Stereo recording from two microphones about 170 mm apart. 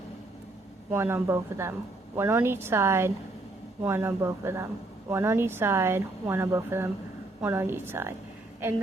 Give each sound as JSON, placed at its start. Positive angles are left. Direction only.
{"t": 0.9, "sound": "a woman's voice", "side_deg": -15}